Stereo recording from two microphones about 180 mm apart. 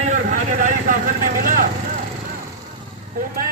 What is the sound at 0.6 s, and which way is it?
Vehicle, 45° right (ahead or behind).